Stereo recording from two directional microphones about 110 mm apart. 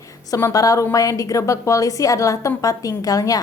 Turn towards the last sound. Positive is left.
turn(degrees=35)  # may be behind; listen again after turning